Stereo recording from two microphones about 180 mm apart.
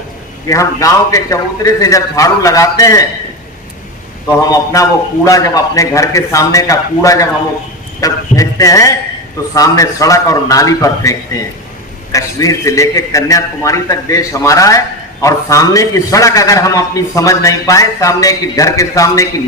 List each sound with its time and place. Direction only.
0.4 s a man's voice: 15° left (ahead or behind)
4.5 s a man's voice: 20° left (ahead or behind)